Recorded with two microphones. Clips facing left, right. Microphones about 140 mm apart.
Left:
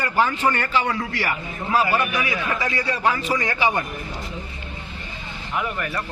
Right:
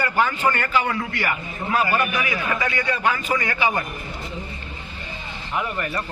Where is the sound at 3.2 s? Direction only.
30° left (ahead or behind).